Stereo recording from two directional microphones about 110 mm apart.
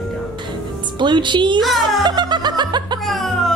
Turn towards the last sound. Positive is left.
turn(degrees=0)  # may be behind; listen again after turning